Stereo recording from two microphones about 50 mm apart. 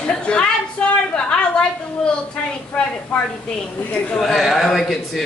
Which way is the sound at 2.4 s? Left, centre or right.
Centre.